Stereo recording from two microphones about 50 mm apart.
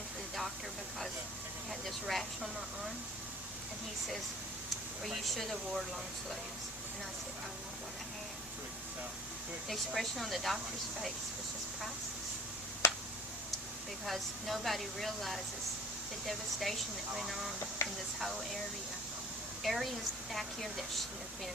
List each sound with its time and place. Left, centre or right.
1.8 s speech: centre
5.0 s speech: centre
9.6 s speech: centre
12.8 s a sound: left
14.0 s speech: centre
17.8 s speech: left
18.2 s speech: centre
19.6 s speech: centre